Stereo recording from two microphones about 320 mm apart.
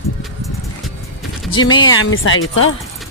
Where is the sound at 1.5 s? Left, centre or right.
Centre.